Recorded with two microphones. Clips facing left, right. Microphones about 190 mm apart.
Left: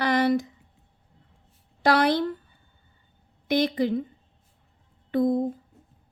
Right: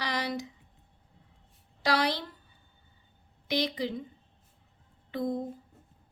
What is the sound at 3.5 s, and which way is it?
Speech, 50° left (ahead or behind).